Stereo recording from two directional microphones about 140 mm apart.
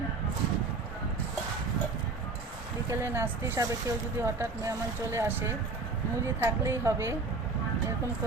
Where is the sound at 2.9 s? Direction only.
15° right (ahead or behind).